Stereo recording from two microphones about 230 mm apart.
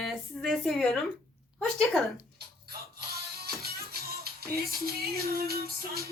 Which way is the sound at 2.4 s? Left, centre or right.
Right.